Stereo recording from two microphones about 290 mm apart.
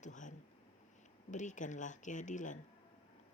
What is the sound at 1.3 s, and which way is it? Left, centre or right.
A woman's voice, left.